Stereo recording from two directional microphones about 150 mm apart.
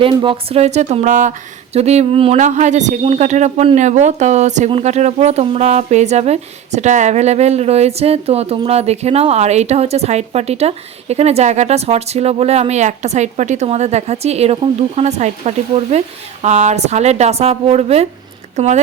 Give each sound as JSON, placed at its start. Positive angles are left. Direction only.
{"t": 0.0, "sound": "speech", "side_deg": -35}
{"t": 1.7, "sound": "speech", "side_deg": -45}